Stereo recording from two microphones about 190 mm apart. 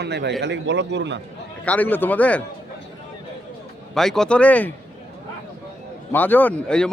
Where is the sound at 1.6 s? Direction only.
10° left (ahead or behind).